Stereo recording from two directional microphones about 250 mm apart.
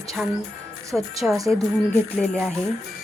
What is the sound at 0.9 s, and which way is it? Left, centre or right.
Speech, centre.